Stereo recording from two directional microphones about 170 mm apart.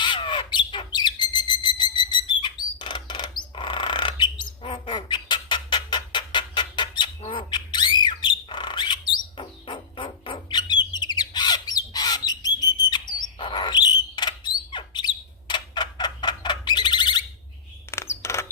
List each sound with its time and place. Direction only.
0.0 s squawk: 30° left (ahead or behind)
1.6 s whistle: 25° left (ahead or behind)
2.4 s bird: 30° left (ahead or behind)
7.2 s squawk: 30° left (ahead or behind)
17.9 s a sound: 15° left (ahead or behind)